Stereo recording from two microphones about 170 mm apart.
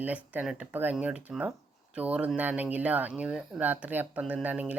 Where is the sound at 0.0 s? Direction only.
10° right (ahead or behind).